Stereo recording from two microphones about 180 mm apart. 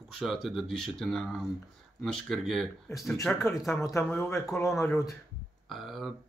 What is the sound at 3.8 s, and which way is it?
Speech, 15° left (ahead or behind).